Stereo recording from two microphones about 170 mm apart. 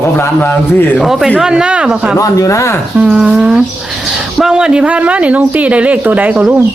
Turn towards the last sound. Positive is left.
turn(degrees=-5)  # may be behind; listen again after turning